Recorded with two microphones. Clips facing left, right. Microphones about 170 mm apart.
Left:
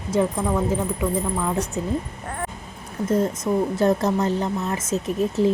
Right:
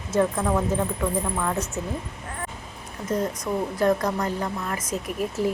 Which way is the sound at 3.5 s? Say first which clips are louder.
Left 2 dB; 20° left (ahead or behind).